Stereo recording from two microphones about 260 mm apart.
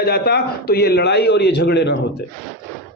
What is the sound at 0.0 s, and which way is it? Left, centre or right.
A man's voice, left.